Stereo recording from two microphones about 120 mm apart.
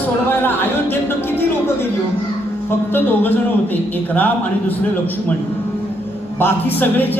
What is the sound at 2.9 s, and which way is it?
Speech, 15° left (ahead or behind).